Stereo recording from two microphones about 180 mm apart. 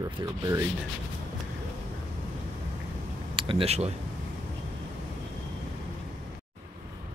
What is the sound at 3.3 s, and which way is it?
Speech, 30° right (ahead or behind).